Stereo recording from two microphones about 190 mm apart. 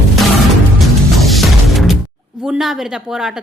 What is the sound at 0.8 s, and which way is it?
Music, centre (ahead or behind).